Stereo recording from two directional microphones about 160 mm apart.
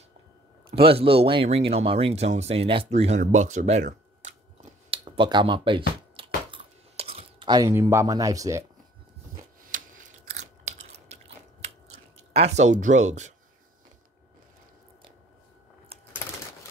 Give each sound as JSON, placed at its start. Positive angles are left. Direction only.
{"t": 0.7, "sound": "speech", "side_deg": -35}
{"t": 4.9, "sound": "a sound", "side_deg": -35}
{"t": 10.4, "sound": "scissors", "side_deg": -45}
{"t": 12.3, "sound": "speech", "side_deg": -45}